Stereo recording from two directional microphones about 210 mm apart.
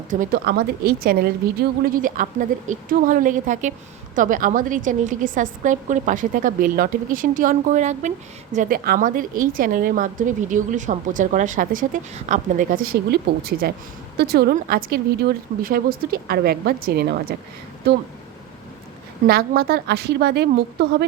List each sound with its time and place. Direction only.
0.1 s a woman's voice: 40° right (ahead or behind)
19.3 s speech: 45° right (ahead or behind)